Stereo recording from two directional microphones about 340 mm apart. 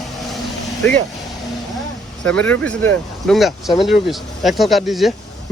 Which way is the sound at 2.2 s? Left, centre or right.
Centre.